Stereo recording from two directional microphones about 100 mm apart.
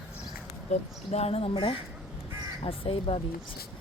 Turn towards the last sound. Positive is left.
turn(degrees=70)  # may be behind; listen again after turning